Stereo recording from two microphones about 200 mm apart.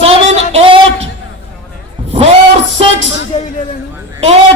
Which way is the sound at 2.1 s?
30° right (ahead or behind).